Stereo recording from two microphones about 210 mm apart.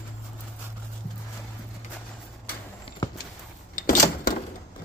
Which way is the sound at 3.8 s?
40° left (ahead or behind).